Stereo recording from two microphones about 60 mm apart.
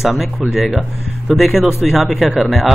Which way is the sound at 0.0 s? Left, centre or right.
Centre.